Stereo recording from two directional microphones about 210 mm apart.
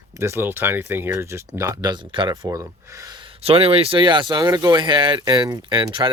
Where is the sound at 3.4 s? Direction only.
30° right (ahead or behind).